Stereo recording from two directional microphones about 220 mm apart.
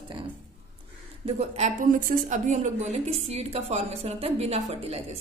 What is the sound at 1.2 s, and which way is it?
A woman's voice, 30° right (ahead or behind).